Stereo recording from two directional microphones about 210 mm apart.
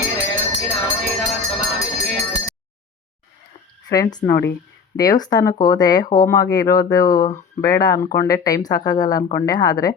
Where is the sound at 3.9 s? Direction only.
20° left (ahead or behind).